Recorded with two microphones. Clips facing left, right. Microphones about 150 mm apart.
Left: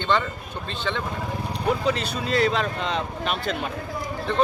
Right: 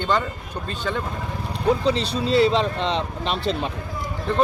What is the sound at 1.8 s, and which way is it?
Speech, 30° right (ahead or behind).